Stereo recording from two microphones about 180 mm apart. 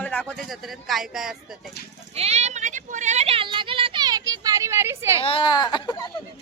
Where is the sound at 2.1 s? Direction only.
35° right (ahead or behind); by 5.2 s 15° right (ahead or behind).